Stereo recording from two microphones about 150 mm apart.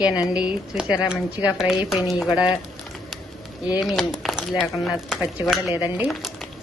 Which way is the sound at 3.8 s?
Centre (ahead or behind).